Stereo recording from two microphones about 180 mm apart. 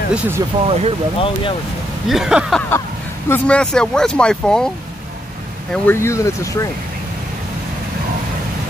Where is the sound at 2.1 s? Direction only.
5° right (ahead or behind).